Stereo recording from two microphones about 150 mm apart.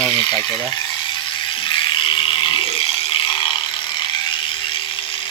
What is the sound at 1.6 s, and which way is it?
Ratchet, 35° left (ahead or behind).